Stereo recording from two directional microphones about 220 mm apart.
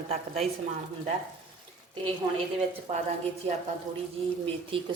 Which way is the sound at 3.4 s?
30° right (ahead or behind).